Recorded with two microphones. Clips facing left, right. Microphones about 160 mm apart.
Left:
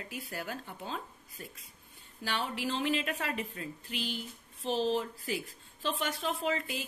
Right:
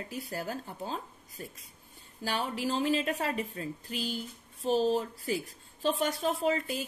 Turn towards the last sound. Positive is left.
turn(degrees=-40)  # may be behind; listen again after turning